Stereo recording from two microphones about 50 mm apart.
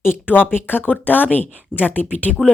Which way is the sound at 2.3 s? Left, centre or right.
Centre.